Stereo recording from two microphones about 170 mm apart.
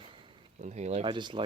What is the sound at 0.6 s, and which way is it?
Speech, 45° right (ahead or behind).